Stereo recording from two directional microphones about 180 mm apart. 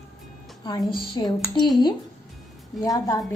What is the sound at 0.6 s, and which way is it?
A woman's voice, 25° left (ahead or behind).